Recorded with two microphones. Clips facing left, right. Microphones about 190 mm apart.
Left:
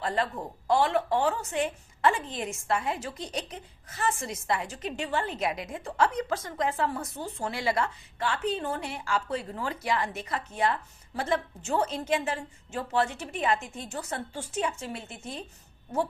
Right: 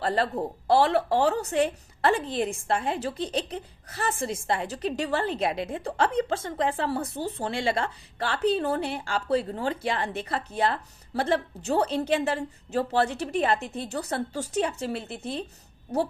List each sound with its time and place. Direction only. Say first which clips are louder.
0.0 s a woman's voice: right 4 dB; 35° right (ahead or behind)